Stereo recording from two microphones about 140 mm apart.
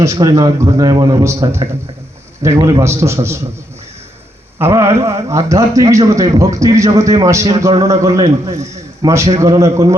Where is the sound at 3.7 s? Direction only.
50° right (ahead or behind).